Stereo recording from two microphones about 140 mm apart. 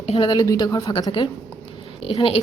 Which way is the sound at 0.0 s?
50° left (ahead or behind).